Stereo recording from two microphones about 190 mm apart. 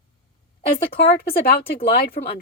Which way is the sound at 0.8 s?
60° left (ahead or behind).